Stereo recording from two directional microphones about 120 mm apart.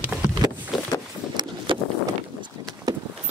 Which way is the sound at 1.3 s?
35° right (ahead or behind).